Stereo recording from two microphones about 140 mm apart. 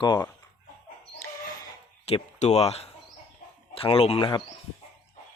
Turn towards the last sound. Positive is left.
turn(degrees=35)  # may be behind; listen again after turning